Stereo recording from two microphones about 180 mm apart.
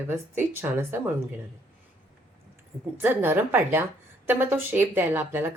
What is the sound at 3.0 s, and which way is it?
A woman's voice, 10° right (ahead or behind).